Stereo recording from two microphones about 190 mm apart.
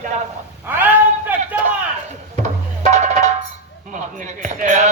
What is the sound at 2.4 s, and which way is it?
Music, 40° right (ahead or behind).